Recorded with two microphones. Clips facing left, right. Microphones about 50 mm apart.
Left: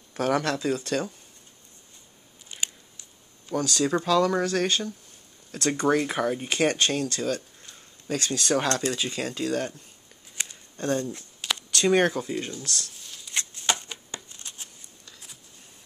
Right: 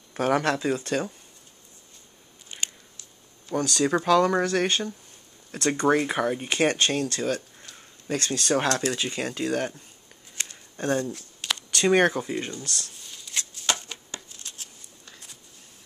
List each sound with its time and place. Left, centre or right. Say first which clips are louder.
0.1 s speech: right 2 dB; right
0.6 s speech: right 1 dB; centre
3.5 s speech: right 1 dB; centre
3.8 s speech: right 2 dB; right
10.3 s a sound: even; centre
10.8 s speech: right 1 dB; right
13.0 s shuffling cards: even; centre
13.3 s shuffling cards: left 1 dB; left